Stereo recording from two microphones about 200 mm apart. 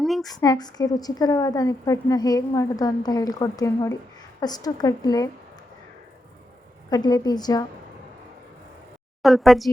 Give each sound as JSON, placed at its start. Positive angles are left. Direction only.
{"t": 0.0, "sound": "a sound", "side_deg": 0}
{"t": 0.3, "sound": "a woman's voice", "side_deg": 20}
{"t": 6.9, "sound": "a woman's voice", "side_deg": 20}
{"t": 9.2, "sound": "speech", "side_deg": 0}